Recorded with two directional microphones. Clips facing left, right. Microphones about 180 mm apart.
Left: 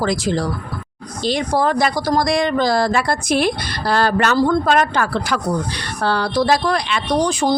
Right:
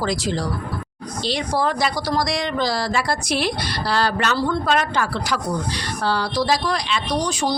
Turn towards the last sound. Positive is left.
turn(degrees=55)  # may be behind; listen again after turning